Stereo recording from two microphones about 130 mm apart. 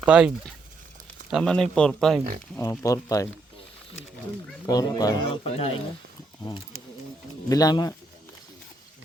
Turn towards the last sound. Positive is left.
turn(degrees=30)  # may be behind; listen again after turning